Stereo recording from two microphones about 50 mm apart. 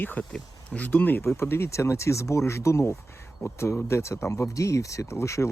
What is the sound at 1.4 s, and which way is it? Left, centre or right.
Speech, left.